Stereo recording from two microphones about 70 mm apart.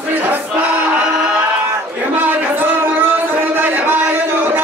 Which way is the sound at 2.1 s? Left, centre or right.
Right.